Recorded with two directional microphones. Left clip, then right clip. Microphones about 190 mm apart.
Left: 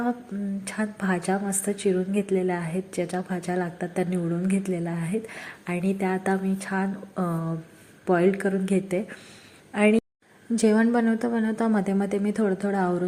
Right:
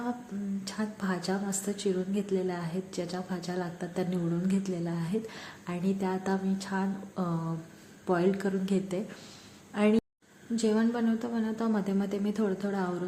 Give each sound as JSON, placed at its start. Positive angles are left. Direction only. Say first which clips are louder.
{"t": 0.6, "sound": "a woman's voice", "louder": "left 7 dB", "side_deg": 25}
{"t": 10.5, "sound": "a woman's voice", "louder": "left 7 dB", "side_deg": 35}